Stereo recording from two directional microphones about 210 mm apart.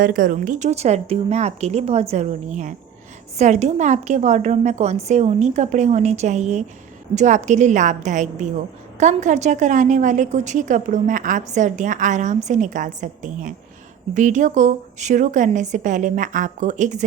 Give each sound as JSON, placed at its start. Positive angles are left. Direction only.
{"t": 0.0, "sound": "a woman's voice", "side_deg": -40}